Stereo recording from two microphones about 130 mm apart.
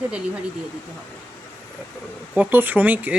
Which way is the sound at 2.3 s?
10° right (ahead or behind).